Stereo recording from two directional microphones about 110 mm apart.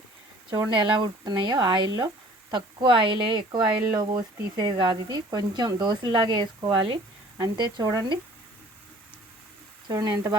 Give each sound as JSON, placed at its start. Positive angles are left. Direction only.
{"t": 0.5, "sound": "speech", "side_deg": -45}
{"t": 9.9, "sound": "speech", "side_deg": -35}